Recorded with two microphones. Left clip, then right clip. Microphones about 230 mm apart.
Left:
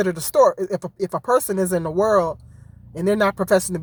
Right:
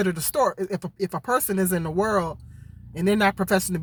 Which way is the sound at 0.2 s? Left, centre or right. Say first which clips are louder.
Left 7 dB; centre.